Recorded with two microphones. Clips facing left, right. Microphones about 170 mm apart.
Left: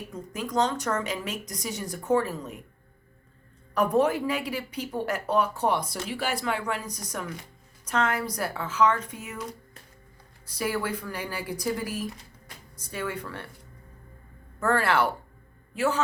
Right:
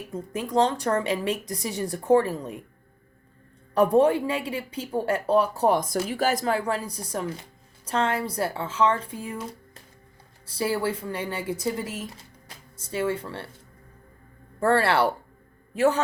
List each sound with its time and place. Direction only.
0.1 s a woman's voice: 30° right (ahead or behind)
3.8 s a woman's voice: 30° right (ahead or behind)
14.6 s a woman's voice: 30° right (ahead or behind)